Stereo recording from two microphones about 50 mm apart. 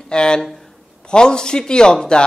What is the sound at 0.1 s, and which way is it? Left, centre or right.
A man's voice, centre.